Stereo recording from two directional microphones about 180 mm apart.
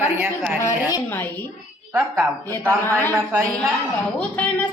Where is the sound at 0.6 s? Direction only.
15° left (ahead or behind).